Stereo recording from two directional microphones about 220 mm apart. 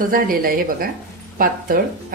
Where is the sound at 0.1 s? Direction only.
40° right (ahead or behind).